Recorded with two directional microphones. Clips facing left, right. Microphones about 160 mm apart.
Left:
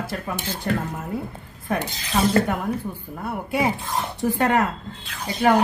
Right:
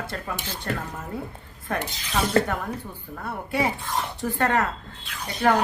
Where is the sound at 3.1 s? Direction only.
15° left (ahead or behind).